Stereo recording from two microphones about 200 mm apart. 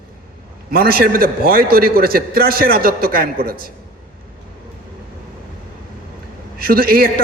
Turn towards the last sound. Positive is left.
turn(degrees=-45)  # may be behind; listen again after turning